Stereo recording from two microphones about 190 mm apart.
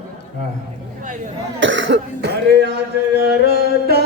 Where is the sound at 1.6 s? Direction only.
75° right (ahead or behind).